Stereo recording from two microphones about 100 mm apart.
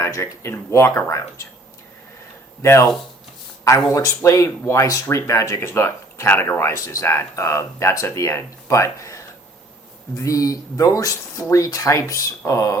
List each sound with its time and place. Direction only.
0.0 s speech: 25° left (ahead or behind)
2.6 s speech: 30° left (ahead or behind)